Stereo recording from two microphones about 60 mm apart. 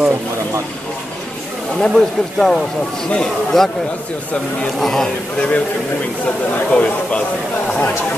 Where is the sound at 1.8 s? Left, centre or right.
Centre.